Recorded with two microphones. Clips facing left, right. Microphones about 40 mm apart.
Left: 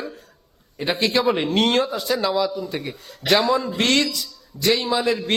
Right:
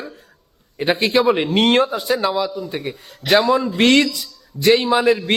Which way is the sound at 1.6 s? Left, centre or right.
Right.